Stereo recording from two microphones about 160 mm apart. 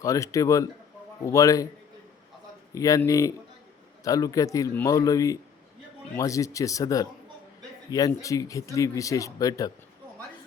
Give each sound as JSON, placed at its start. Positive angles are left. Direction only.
{"t": 0.0, "sound": "speech", "side_deg": 20}
{"t": 2.7, "sound": "speech", "side_deg": 20}